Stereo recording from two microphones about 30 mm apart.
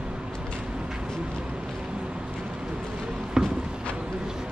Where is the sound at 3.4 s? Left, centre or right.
Centre.